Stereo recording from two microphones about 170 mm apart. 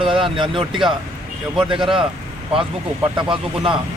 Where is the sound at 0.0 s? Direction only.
30° right (ahead or behind).